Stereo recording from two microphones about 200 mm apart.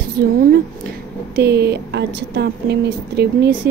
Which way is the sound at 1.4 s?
55° right (ahead or behind).